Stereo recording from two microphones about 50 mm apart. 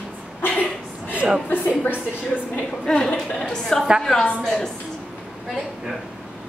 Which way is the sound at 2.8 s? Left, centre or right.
Centre.